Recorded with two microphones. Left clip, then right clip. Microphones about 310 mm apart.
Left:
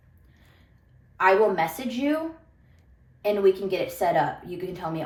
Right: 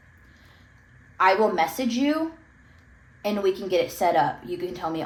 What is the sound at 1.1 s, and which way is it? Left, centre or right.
A woman's voice, right.